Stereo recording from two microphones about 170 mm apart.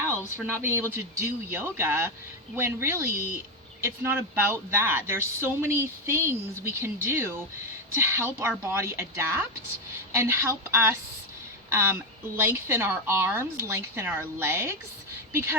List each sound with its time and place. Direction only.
0.6 s speech: 15° right (ahead or behind)
3.2 s speech: 55° right (ahead or behind)
3.8 s speech: 15° right (ahead or behind)